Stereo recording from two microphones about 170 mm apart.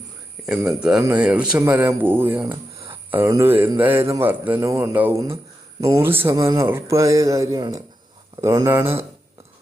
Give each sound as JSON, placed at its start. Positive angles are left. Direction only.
{"t": 0.8, "sound": "speech", "side_deg": -5}